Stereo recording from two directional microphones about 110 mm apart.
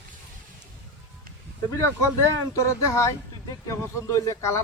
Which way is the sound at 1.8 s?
25° left (ahead or behind).